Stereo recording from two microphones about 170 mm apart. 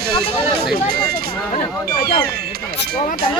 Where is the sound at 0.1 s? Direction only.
65° right (ahead or behind).